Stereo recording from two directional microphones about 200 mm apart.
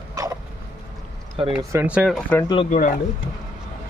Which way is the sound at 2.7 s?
40° left (ahead or behind).